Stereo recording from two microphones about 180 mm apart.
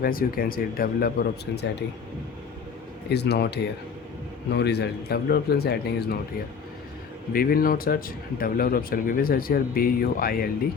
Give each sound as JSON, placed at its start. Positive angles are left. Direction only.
{"t": 0.0, "sound": "speech", "side_deg": 55}
{"t": 3.1, "sound": "speech", "side_deg": 65}
{"t": 7.3, "sound": "speech", "side_deg": 55}